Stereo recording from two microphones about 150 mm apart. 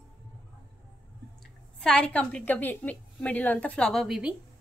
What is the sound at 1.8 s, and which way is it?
A woman's voice, 5° left (ahead or behind).